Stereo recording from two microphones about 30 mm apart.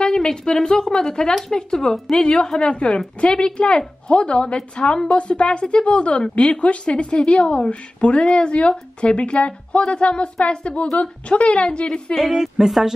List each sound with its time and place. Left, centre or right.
0.0 s a woman's voice: left
12.2 s a woman's voice: centre